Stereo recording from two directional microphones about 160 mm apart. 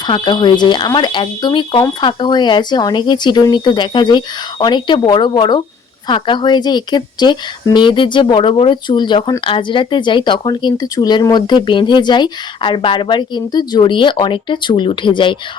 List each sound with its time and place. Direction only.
0.1 s speech: 30° left (ahead or behind)